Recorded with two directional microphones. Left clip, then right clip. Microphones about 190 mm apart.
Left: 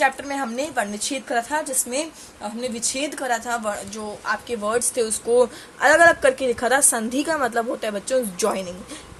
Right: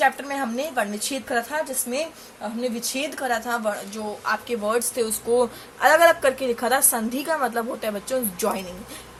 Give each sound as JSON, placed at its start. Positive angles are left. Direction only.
{"t": 0.0, "sound": "a woman's voice", "side_deg": 20}